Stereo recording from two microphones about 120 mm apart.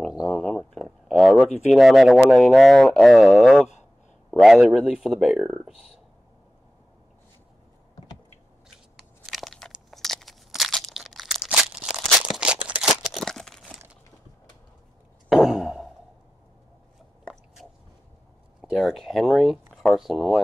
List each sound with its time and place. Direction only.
0.2 s speech: 10° left (ahead or behind)
0.8 s a sound: centre (ahead or behind)
1.7 s speech: centre (ahead or behind)
9.2 s crushing: centre (ahead or behind)
15.2 s a sound: centre (ahead or behind)
17.6 s squish: centre (ahead or behind)
18.6 s speech: centre (ahead or behind)